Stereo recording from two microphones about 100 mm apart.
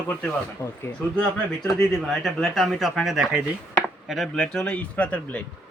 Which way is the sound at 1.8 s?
5° left (ahead or behind).